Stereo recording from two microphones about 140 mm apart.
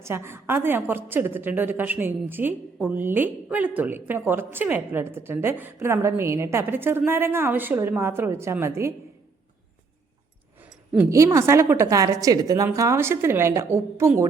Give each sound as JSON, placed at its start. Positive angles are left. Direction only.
{"t": 0.0, "sound": "a woman's voice", "side_deg": -15}
{"t": 10.6, "sound": "a woman's voice", "side_deg": -15}